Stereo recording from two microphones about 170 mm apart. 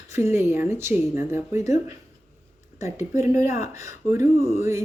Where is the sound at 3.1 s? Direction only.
15° right (ahead or behind).